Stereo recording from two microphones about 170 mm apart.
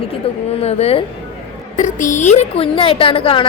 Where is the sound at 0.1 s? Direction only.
35° left (ahead or behind).